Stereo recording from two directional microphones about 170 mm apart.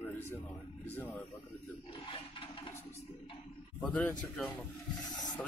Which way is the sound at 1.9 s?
30° left (ahead or behind).